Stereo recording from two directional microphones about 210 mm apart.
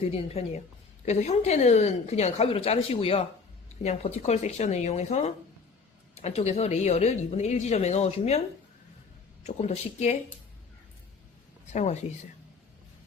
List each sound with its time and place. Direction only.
0.3 s speech: 30° left (ahead or behind)
9.4 s speech: 30° left (ahead or behind)
11.7 s speech: 30° left (ahead or behind)